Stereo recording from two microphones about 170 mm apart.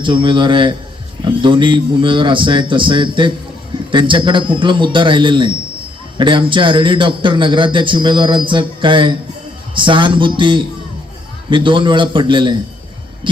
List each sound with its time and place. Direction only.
0.0 s a man's voice: 30° right (ahead or behind)